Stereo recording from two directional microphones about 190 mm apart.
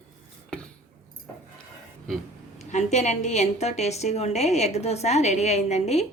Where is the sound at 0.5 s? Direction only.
5° left (ahead or behind).